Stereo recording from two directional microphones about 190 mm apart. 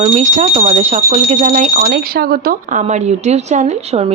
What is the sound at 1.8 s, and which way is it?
Speech, 55° right (ahead or behind).